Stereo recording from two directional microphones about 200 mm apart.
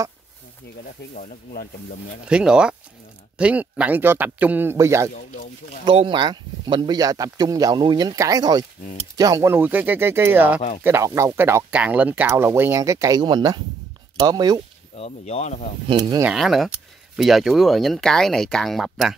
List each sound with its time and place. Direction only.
1.1 s speech: 40° left (ahead or behind)
2.2 s speech: 5° right (ahead or behind)
5.9 s speech: 25° right (ahead or behind)
15.0 s speech: 30° left (ahead or behind)
15.9 s speech: 20° right (ahead or behind)
16.3 s speech: centre (ahead or behind)